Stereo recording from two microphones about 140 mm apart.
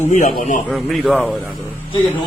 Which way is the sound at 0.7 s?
Centre (ahead or behind).